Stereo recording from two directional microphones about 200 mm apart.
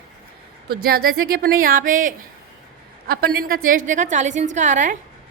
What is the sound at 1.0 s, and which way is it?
A woman's voice, 50° right (ahead or behind).